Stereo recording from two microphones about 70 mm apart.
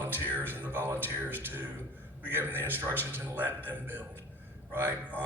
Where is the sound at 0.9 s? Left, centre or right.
Right.